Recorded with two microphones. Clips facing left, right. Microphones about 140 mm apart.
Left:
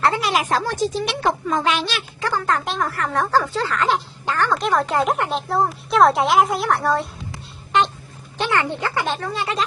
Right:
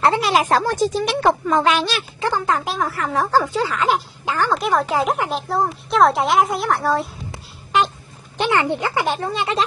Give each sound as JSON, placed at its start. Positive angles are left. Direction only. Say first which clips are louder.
{"t": 0.0, "sound": "speech", "louder": "right 3 dB", "side_deg": -25}
{"t": 2.1, "sound": "speech", "louder": "right 2 dB", "side_deg": -20}
{"t": 2.5, "sound": "speech", "louder": "right 1 dB", "side_deg": 0}
{"t": 8.4, "sound": "speech", "louder": "right 3 dB", "side_deg": -15}